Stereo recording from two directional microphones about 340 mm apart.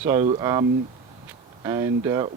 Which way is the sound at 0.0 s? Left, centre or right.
Centre.